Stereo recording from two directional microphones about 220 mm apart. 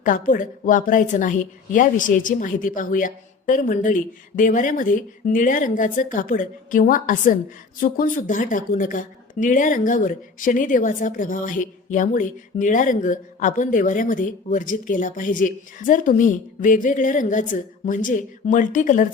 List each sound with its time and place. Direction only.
0.0 s a woman's voice: 35° left (ahead or behind)